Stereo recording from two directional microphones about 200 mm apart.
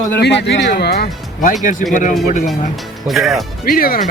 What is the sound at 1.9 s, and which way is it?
Speech, 40° left (ahead or behind).